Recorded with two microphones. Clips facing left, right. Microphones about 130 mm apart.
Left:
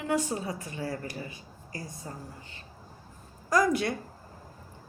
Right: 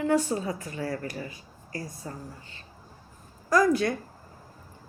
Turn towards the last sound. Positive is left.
turn(degrees=20)  # may be behind; listen again after turning